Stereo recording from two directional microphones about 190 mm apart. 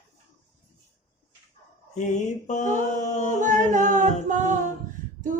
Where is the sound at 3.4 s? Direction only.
40° right (ahead or behind).